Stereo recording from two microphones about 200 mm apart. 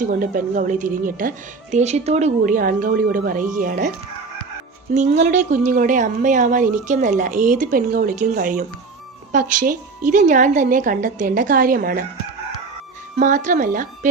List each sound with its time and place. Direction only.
0.0 s a woman's voice: 45° right (ahead or behind)
4.9 s a woman's voice: 35° right (ahead or behind)
13.1 s a woman's voice: 40° right (ahead or behind)